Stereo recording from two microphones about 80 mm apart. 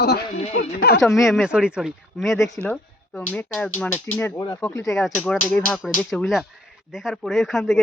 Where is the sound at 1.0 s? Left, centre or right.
Centre.